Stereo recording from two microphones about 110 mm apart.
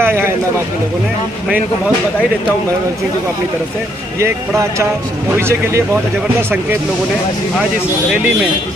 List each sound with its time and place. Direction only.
0.0 s a man's voice: 20° right (ahead or behind)
4.2 s speech: 25° right (ahead or behind)